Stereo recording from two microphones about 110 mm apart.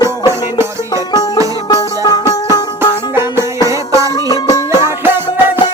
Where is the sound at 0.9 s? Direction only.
35° left (ahead or behind).